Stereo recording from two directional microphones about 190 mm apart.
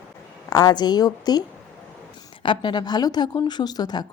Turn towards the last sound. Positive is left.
turn(degrees=20)  # may be behind; listen again after turning